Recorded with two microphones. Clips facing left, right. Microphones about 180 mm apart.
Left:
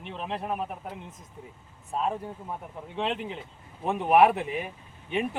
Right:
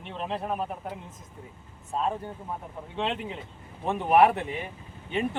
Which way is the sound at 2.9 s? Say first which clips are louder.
Even; centre (ahead or behind).